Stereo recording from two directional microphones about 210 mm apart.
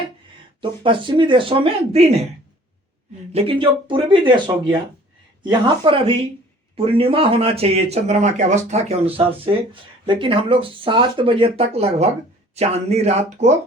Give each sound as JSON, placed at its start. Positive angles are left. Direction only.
{"t": 0.6, "sound": "speech", "side_deg": -25}
{"t": 3.3, "sound": "speech", "side_deg": -25}